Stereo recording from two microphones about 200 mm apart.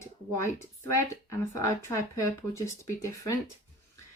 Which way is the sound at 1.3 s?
15° left (ahead or behind).